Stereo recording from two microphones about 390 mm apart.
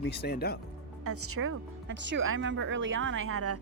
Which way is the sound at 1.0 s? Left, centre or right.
Right.